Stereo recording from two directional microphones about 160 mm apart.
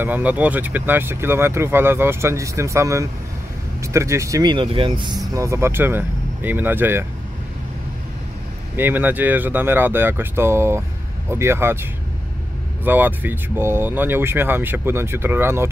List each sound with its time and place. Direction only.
0.0 s speech: 10° right (ahead or behind); by 5.2 s 30° right (ahead or behind)
5.3 s speech: 20° right (ahead or behind)
8.7 s speech: 10° right (ahead or behind)
12.8 s speech: 10° right (ahead or behind)